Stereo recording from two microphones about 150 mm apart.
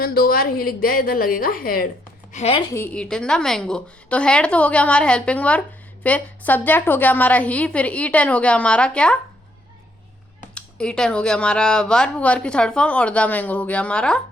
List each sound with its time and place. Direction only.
0.0 s a woman's voice: 85° left
2.3 s a woman's voice: 45° left (ahead or behind)
2.6 s a woman's voice: 20° left (ahead or behind)
2.9 s a woman's voice: 5° left (ahead or behind)
10.5 s a woman's voice: 5° left (ahead or behind)